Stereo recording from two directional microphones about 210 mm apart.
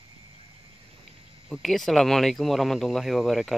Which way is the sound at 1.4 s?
Centre (ahead or behind).